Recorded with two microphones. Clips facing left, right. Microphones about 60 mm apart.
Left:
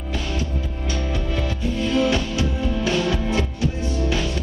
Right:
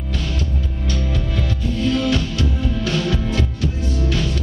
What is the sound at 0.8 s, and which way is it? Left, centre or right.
Music, centre.